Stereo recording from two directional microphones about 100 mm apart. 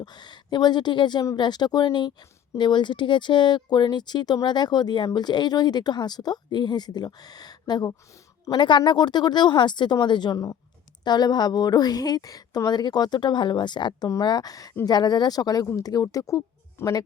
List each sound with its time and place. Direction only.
0.0 s a woman's voice: 45° left (ahead or behind)
10.3 s speech: 35° left (ahead or behind)